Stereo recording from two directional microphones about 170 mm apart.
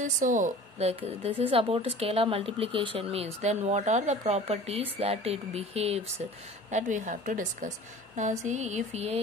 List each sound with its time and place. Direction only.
0.0 s a woman's voice: 50° right (ahead or behind)
6.7 s a woman's voice: 50° right (ahead or behind)